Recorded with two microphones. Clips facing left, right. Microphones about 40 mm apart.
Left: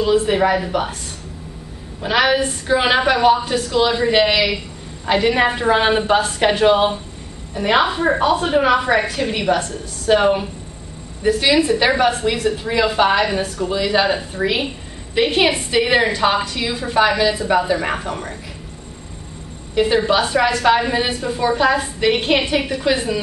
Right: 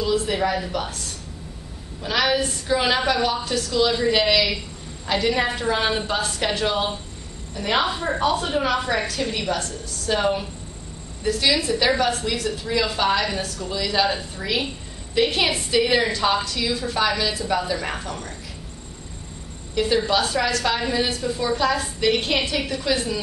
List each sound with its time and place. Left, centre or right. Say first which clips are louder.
0.0 s a woman's voice: left 6 dB; left
2.0 s a woman's voice: left 5 dB; left
19.7 s a woman's voice: left 5 dB; left